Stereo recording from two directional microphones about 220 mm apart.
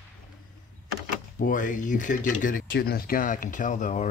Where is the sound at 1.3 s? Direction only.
35° left (ahead or behind).